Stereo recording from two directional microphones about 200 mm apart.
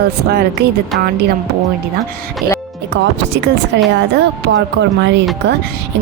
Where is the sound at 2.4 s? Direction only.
50° right (ahead or behind).